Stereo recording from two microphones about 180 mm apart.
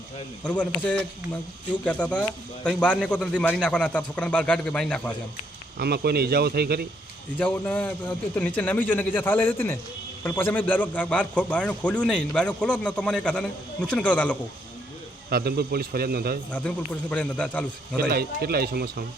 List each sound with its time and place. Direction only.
0.4 s a man's voice: 5° left (ahead or behind)
5.8 s a man's voice: 60° right (ahead or behind)
7.3 s a man's voice: 10° left (ahead or behind)
15.3 s a man's voice: 60° right (ahead or behind)
16.5 s a man's voice: 5° left (ahead or behind)
18.1 s a man's voice: 60° right (ahead or behind)